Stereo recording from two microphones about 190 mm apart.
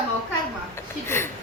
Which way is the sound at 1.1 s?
10° left (ahead or behind).